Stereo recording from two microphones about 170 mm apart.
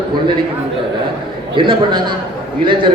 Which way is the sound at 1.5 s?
30° right (ahead or behind).